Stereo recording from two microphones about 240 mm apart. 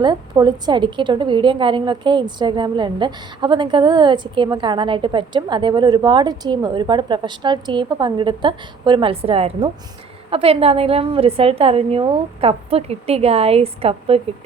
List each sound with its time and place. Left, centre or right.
0.0 s a woman's voice: centre